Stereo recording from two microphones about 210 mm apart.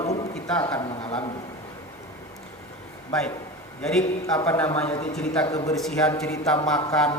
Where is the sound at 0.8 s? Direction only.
25° left (ahead or behind).